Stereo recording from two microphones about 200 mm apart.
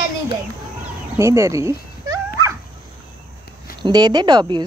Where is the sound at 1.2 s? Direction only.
15° right (ahead or behind).